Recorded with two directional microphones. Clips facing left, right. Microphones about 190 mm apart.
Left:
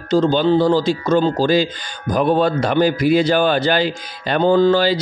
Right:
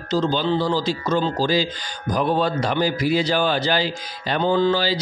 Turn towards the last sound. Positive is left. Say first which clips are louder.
# left 6 dB
turn(degrees=55)  # may be behind; listen again after turning